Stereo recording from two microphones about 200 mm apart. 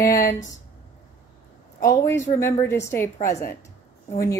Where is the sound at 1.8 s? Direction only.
15° left (ahead or behind).